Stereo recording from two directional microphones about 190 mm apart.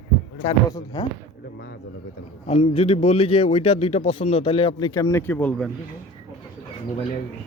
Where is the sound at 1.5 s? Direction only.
60° left (ahead or behind).